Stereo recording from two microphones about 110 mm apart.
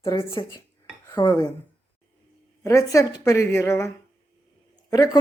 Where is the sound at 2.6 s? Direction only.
30° left (ahead or behind).